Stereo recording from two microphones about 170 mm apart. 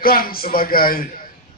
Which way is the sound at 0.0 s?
60° left (ahead or behind).